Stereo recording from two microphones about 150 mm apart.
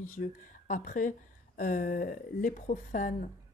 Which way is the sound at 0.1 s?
60° left (ahead or behind).